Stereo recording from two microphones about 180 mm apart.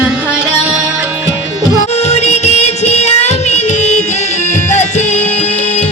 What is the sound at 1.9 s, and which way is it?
Music, 35° left (ahead or behind).